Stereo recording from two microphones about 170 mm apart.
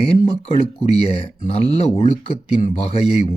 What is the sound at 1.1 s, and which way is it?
Speech, 35° left (ahead or behind).